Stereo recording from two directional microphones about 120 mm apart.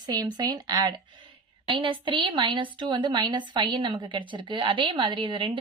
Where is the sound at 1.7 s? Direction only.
45° right (ahead or behind).